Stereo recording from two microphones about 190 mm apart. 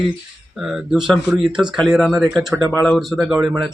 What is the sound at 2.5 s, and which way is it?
Speech, 15° right (ahead or behind).